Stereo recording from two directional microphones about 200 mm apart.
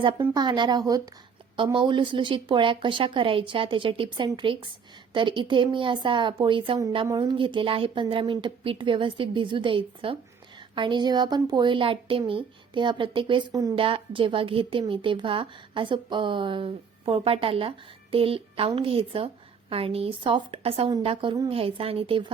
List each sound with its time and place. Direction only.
0.0 s speech: 25° right (ahead or behind)